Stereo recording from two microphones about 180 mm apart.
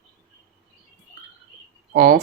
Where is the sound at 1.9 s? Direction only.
50° right (ahead or behind).